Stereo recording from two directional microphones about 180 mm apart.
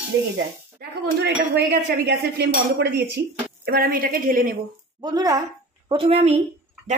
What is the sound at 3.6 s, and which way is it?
Speech, 55° right (ahead or behind).